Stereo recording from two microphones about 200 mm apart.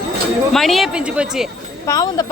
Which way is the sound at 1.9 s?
20° left (ahead or behind).